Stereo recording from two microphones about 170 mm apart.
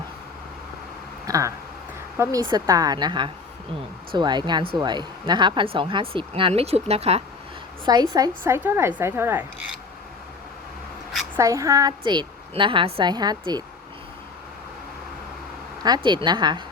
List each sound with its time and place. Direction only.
1.3 s a sound: 20° right (ahead or behind)
2.1 s a woman's voice: 15° right (ahead or behind); by 7.2 s 35° right (ahead or behind)
8.1 s a woman's voice: 20° right (ahead or behind)
11.3 s a woman's voice: 20° right (ahead or behind)
15.8 s a woman's voice: 25° right (ahead or behind)